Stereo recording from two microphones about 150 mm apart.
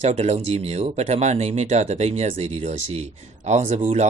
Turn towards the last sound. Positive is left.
turn(degrees=-50)  # may be behind; listen again after turning